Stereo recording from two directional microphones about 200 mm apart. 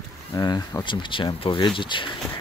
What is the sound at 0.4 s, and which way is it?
Speech, 20° left (ahead or behind).